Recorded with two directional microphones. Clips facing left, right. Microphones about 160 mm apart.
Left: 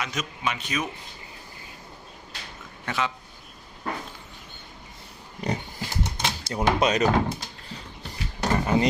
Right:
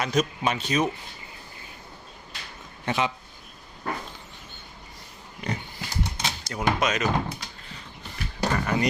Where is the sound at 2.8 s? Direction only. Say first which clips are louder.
Right 2 dB; 20° right (ahead or behind).